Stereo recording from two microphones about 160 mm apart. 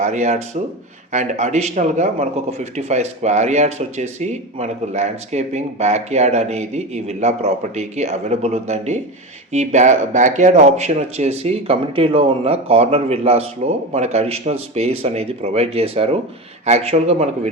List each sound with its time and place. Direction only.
0.0 s speech: 45° right (ahead or behind)